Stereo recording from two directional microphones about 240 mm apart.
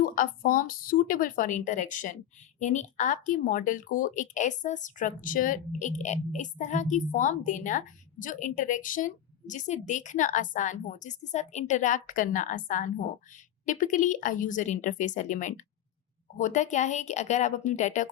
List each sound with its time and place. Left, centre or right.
0.0 s a woman's voice: left